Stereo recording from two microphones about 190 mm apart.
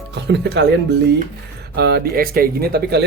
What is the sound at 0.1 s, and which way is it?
Speech, 65° right (ahead or behind).